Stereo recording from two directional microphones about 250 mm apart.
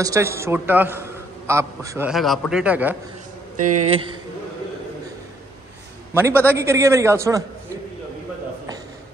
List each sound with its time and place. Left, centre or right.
0.0 s a man's voice: centre
3.5 s speech: right
6.1 s a man's voice: centre